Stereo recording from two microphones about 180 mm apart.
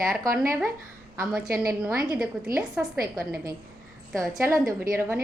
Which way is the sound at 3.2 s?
10° right (ahead or behind).